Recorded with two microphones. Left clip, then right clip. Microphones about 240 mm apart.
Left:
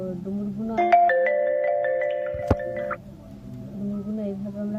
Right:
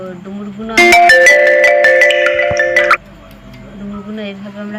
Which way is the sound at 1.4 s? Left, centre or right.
Right.